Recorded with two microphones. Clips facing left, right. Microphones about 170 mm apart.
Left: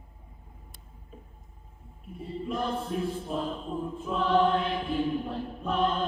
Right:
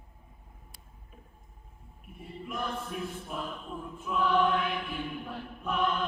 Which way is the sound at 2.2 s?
30° left (ahead or behind).